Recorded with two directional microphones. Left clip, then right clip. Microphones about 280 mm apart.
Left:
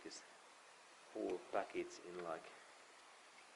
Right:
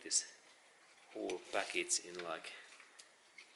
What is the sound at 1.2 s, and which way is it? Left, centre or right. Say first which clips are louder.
Speech: right 3 dB; centre.